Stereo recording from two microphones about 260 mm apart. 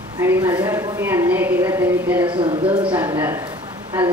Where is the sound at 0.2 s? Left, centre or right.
Centre.